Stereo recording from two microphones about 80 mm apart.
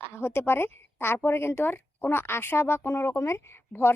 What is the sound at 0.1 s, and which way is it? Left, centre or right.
A woman's voice, left.